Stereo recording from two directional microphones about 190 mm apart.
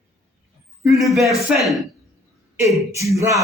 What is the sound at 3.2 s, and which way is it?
Speech, 15° right (ahead or behind).